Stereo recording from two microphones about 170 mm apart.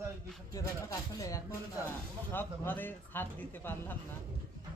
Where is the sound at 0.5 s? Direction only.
20° left (ahead or behind).